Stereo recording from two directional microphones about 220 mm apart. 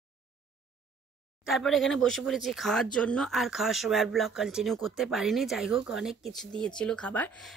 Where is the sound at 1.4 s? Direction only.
Centre (ahead or behind).